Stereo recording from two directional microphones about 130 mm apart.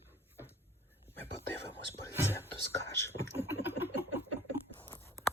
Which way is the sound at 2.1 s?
20° right (ahead or behind).